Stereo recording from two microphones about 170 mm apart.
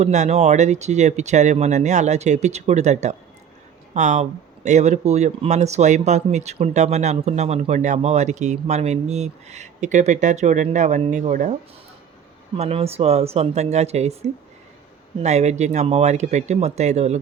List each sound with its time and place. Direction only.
0.0 s speech: 40° right (ahead or behind)
12.5 s speech: 35° right (ahead or behind)